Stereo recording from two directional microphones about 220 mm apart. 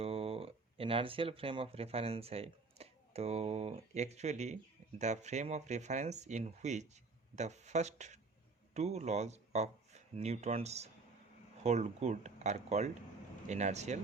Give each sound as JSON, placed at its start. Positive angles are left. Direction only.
{"t": 0.0, "sound": "speech", "side_deg": -25}